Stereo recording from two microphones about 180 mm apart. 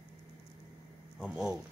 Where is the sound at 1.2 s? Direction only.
5° right (ahead or behind).